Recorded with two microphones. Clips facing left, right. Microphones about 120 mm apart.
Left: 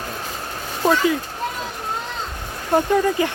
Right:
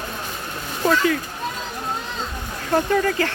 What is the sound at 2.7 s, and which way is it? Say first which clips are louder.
Speech: left 2 dB; 15° left (ahead or behind).